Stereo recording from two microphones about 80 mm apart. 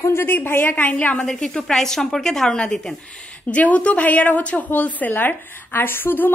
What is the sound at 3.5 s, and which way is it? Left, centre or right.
A woman's voice, centre.